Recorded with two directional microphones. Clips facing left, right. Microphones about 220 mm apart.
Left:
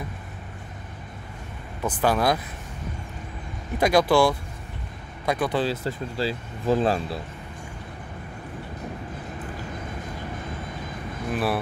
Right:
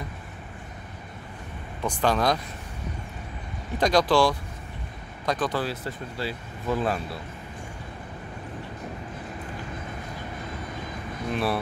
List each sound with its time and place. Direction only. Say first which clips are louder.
1.8 s speech: left 1 dB; 5° left (ahead or behind)
3.7 s speech: left 2 dB; 10° left (ahead or behind)
5.6 s speech: left 5 dB; 30° left (ahead or behind)
11.3 s speech: left 1 dB; 5° left (ahead or behind)